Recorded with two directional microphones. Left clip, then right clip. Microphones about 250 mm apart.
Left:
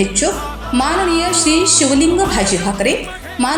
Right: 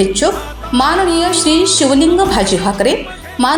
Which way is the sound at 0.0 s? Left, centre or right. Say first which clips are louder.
Right 4 dB; centre.